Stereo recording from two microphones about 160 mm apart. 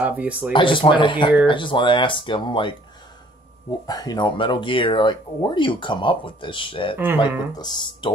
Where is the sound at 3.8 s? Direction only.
25° left (ahead or behind).